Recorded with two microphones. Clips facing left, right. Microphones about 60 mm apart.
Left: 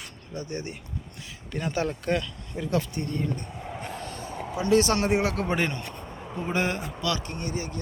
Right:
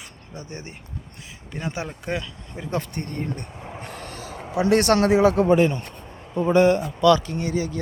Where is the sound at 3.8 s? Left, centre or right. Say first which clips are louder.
Even; right.